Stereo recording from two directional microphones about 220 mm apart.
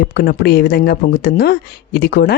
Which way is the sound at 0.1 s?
40° left (ahead or behind).